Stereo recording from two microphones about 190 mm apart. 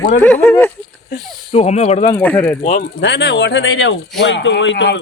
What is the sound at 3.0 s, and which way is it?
Speech, 65° left (ahead or behind).